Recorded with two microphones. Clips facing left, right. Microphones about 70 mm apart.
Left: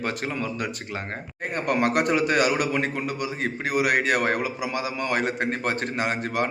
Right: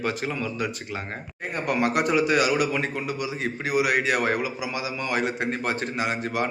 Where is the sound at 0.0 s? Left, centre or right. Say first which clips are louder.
Right 1 dB; left.